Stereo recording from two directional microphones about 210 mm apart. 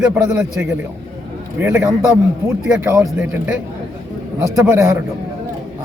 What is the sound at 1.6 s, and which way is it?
Speech, 5° right (ahead or behind).